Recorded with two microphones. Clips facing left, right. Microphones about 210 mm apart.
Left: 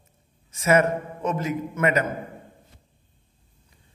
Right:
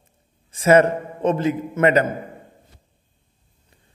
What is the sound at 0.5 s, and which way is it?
A man's voice, 30° right (ahead or behind).